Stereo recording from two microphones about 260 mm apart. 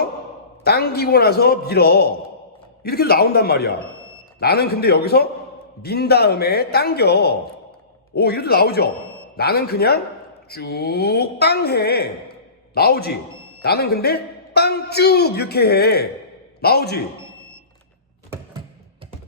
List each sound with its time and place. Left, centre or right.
0.6 s a man's voice: left